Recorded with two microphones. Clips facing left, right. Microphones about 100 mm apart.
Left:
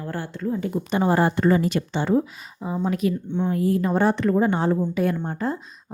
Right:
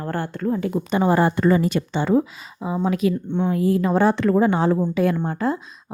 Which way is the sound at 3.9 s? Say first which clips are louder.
Right 3 dB; 90° right.